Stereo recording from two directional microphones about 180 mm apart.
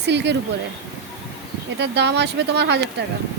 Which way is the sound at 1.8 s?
75° right (ahead or behind).